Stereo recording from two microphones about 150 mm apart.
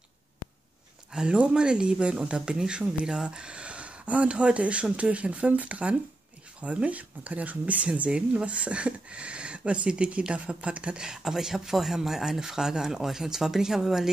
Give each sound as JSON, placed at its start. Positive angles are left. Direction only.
{"t": 1.1, "sound": "speech", "side_deg": -5}